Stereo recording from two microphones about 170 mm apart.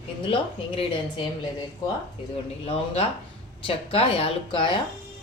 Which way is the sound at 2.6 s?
35° left (ahead or behind).